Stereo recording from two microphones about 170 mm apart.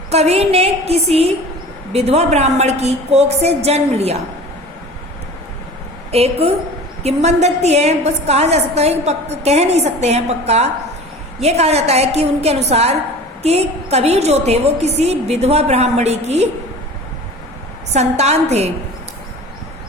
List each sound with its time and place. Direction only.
0.1 s a woman's voice: 40° right (ahead or behind)
6.1 s a woman's voice: 35° right (ahead or behind)
17.9 s a woman's voice: 40° right (ahead or behind)